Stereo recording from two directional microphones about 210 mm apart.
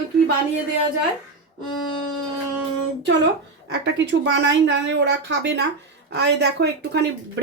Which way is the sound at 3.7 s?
55° right (ahead or behind).